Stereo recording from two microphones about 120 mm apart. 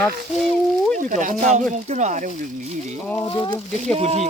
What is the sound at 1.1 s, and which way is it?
Speech, 90° right.